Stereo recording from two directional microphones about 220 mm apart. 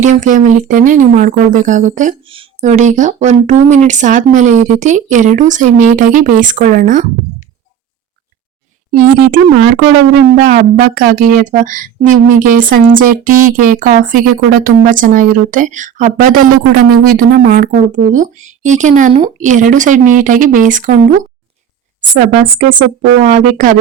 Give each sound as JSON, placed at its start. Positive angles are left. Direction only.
{"t": 0.0, "sound": "speech", "side_deg": -35}
{"t": 8.9, "sound": "a woman's voice", "side_deg": -40}
{"t": 22.6, "sound": "speech", "side_deg": -90}
{"t": 23.2, "sound": "speech", "side_deg": -35}